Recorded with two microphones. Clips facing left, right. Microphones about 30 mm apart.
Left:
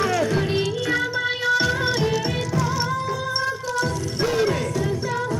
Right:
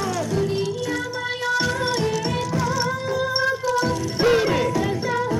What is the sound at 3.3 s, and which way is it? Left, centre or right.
Music, centre.